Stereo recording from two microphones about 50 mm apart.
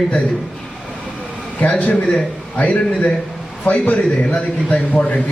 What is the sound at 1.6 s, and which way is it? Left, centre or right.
A man's voice, left.